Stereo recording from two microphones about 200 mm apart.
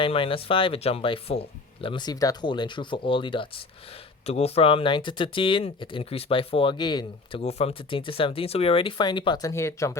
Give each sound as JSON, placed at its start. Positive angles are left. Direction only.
{"t": 0.0, "sound": "speech", "side_deg": 25}